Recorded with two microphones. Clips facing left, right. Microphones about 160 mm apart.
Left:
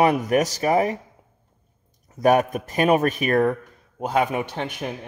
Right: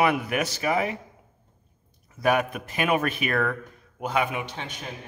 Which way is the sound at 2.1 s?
45° left (ahead or behind).